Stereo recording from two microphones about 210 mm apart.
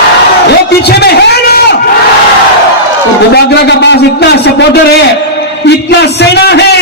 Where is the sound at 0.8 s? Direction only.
50° left (ahead or behind).